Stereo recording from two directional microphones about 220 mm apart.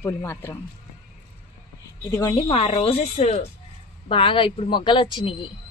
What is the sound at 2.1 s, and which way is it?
Speech, 15° left (ahead or behind).